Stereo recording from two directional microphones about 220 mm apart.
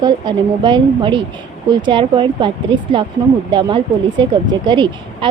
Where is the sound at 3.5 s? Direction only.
20° right (ahead or behind).